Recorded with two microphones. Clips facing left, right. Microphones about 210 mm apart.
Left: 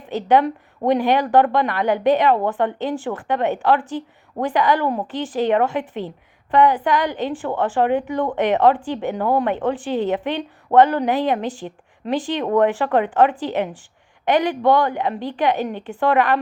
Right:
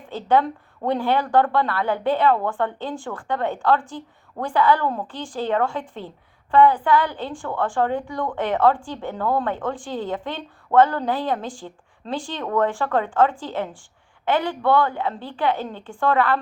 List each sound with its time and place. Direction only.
0.0 s a woman's voice: 20° left (ahead or behind)